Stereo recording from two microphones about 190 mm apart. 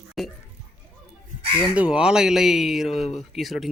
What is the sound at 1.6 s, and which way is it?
Speech, 5° right (ahead or behind).